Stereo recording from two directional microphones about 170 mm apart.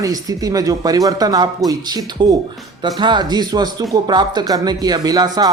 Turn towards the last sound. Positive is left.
turn(degrees=-25)  # may be behind; listen again after turning